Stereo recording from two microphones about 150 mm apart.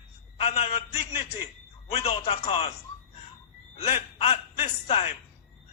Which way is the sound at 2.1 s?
45° left (ahead or behind).